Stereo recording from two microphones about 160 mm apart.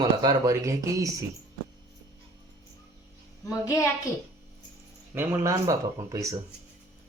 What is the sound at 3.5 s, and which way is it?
Speech, 20° left (ahead or behind).